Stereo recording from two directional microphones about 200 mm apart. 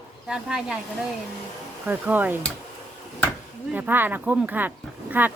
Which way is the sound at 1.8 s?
10° right (ahead or behind).